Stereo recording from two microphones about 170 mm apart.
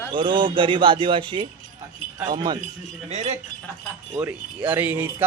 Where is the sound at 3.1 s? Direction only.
40° right (ahead or behind).